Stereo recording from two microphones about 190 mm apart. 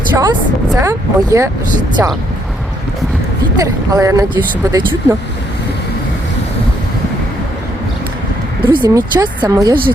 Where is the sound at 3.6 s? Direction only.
20° right (ahead or behind).